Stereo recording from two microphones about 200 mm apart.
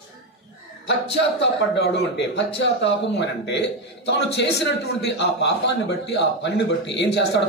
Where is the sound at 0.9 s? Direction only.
60° left (ahead or behind).